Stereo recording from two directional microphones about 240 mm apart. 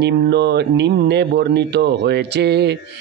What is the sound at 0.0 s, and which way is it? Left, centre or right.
A man's voice, right.